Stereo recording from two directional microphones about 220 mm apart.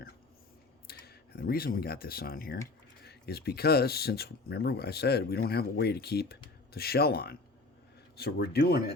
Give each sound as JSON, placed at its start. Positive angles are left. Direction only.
{"t": 0.9, "sound": "speech", "side_deg": 45}